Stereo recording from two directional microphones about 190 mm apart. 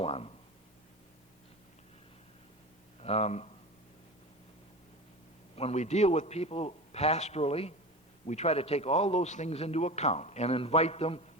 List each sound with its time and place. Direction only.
0.0 s a man's voice: 30° left (ahead or behind)
3.0 s speech: 35° left (ahead or behind)
5.5 s a man's voice: 35° left (ahead or behind)